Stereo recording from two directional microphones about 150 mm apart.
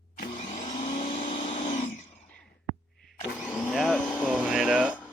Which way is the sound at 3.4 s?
10° left (ahead or behind).